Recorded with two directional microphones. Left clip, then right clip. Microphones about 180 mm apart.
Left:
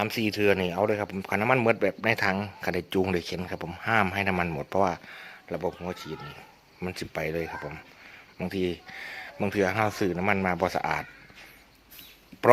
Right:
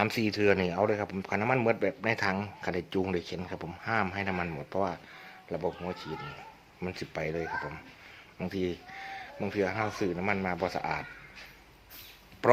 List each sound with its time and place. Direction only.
0.0 s speech: 15° left (ahead or behind); by 6.1 s 40° left (ahead or behind)
6.8 s speech: 25° left (ahead or behind)
9.5 s speech: 50° left (ahead or behind)